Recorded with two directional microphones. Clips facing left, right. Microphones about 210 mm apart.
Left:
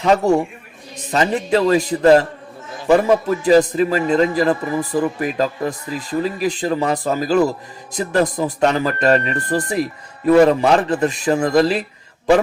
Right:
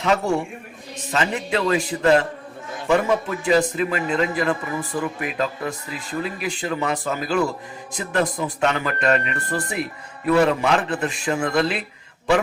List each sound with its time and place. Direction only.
0.0 s a man's voice: 40° left (ahead or behind)